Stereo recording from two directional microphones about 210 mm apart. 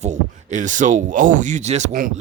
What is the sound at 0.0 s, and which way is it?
Speech, 35° right (ahead or behind).